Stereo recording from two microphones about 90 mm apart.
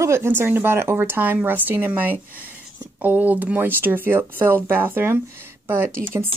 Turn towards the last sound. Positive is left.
turn(degrees=-25)  # may be behind; listen again after turning